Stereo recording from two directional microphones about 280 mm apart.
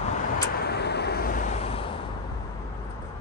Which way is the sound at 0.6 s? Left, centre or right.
Left.